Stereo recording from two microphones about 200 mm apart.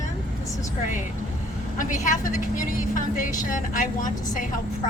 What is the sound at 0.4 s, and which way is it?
Vehicle, 15° left (ahead or behind).